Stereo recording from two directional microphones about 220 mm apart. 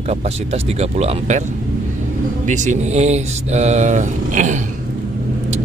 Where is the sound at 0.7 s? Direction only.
30° right (ahead or behind).